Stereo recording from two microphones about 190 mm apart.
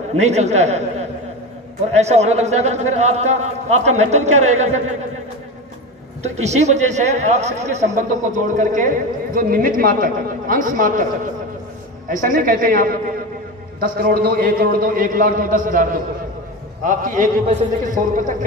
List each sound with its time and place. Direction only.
0.1 s speech: 35° right (ahead or behind)
2.0 s speech: 35° right (ahead or behind)
6.2 s speech: 35° right (ahead or behind)
12.1 s a man's voice: 45° right (ahead or behind)